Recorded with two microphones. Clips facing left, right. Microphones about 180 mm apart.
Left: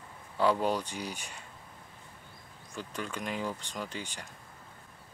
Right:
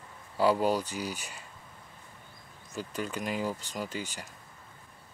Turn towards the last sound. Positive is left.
turn(degrees=-5)  # may be behind; listen again after turning